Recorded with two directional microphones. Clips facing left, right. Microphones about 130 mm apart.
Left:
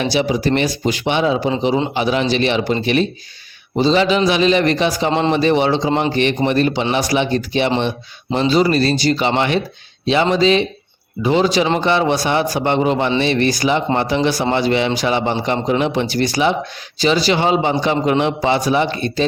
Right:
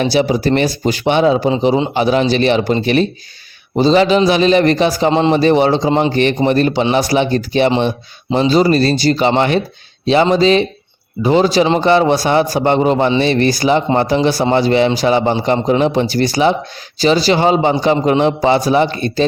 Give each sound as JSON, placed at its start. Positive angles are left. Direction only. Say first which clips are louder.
{"t": 0.0, "sound": "speech", "louder": "right 3 dB", "side_deg": -40}